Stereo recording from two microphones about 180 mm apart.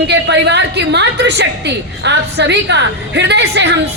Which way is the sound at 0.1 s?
70° right (ahead or behind).